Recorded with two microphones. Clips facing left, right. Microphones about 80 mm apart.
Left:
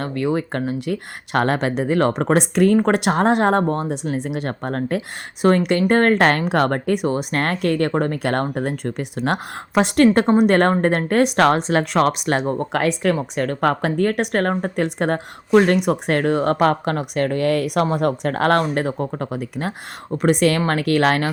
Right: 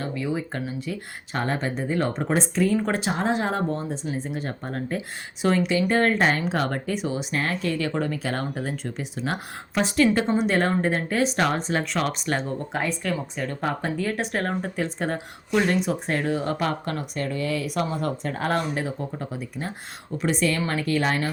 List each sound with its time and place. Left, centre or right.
0.0 s speech: left